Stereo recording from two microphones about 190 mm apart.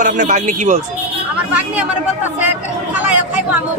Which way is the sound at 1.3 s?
5° right (ahead or behind).